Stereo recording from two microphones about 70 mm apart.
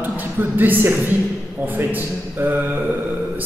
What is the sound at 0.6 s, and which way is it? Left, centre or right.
Speech, right.